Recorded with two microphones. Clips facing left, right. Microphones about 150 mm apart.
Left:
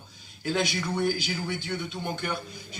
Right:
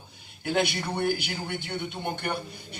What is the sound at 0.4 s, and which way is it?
A man's voice, 60° right (ahead or behind).